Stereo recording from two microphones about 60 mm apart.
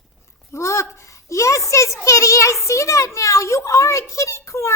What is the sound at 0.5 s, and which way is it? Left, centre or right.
A woman's voice, left.